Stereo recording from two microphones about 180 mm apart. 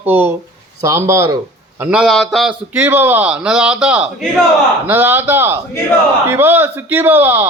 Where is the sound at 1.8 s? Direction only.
5° right (ahead or behind).